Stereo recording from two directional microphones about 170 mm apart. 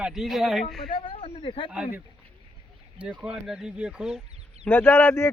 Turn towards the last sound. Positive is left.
turn(degrees=15)  # may be behind; listen again after turning